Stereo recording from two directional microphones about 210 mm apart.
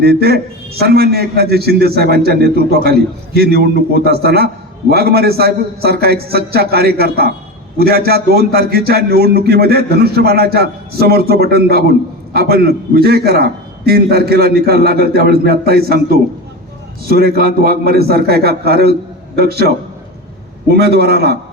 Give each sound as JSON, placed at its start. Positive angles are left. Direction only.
{"t": 0.0, "sound": "a man's voice", "side_deg": -50}